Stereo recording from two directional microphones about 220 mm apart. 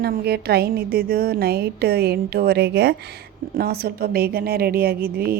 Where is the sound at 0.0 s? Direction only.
45° right (ahead or behind).